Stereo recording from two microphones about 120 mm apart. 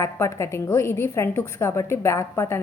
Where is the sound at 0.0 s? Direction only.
25° left (ahead or behind).